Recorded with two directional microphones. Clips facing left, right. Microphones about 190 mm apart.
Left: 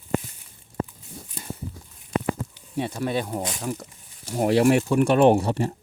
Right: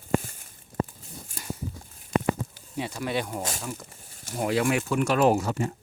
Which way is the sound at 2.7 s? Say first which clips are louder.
Left 4 dB; 35° left (ahead or behind).